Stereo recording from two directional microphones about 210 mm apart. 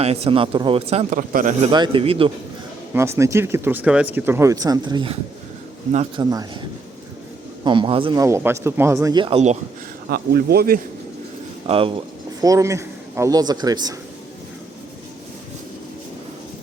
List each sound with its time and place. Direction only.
0.0 s speech: 30° right (ahead or behind)
1.7 s speech: 20° right (ahead or behind)
2.9 s speech: 15° right (ahead or behind)
6.1 s speech: 20° right (ahead or behind)
10.1 s speech: 50° right (ahead or behind)
11.6 s a man's voice: 25° right (ahead or behind)